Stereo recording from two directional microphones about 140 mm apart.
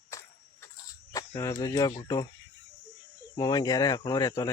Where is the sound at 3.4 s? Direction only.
30° left (ahead or behind).